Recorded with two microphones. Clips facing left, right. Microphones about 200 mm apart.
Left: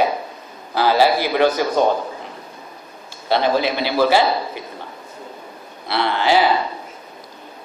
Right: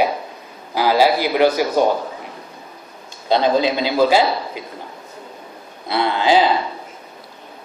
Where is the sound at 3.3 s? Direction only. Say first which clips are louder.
Right 2 dB; 15° right (ahead or behind).